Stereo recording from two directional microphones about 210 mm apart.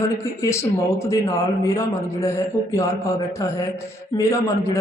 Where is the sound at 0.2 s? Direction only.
15° left (ahead or behind).